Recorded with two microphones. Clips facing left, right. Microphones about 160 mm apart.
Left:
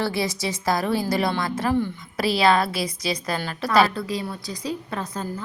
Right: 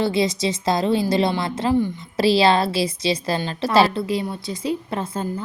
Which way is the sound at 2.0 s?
25° right (ahead or behind).